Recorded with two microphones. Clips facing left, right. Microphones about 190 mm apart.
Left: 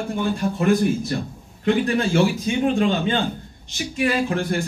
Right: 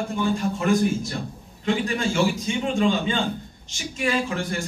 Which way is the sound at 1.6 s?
60° left (ahead or behind).